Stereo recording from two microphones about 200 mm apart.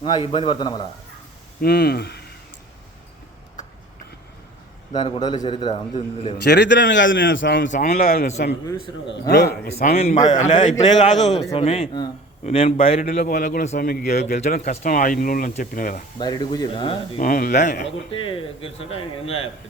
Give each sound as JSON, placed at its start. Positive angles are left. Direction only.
{"t": 0.0, "sound": "a man's voice", "side_deg": 25}
{"t": 1.6, "sound": "speech", "side_deg": 50}
{"t": 4.9, "sound": "a man's voice", "side_deg": 25}
{"t": 6.4, "sound": "a man's voice", "side_deg": 55}
{"t": 7.7, "sound": "a man's voice", "side_deg": 45}
{"t": 8.8, "sound": "a man's voice", "side_deg": 55}
{"t": 9.7, "sound": "a man's voice", "side_deg": 30}
{"t": 14.1, "sound": "a man's voice", "side_deg": 35}
{"t": 16.1, "sound": "a man's voice", "side_deg": 20}
{"t": 17.2, "sound": "a man's voice", "side_deg": 45}
{"t": 18.1, "sound": "a man's voice", "side_deg": 25}